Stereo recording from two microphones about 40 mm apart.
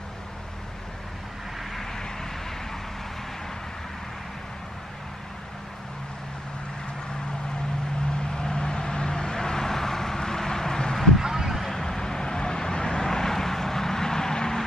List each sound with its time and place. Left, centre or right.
8.2 s vehicle: centre
11.1 s a sound: centre
11.7 s vehicle: centre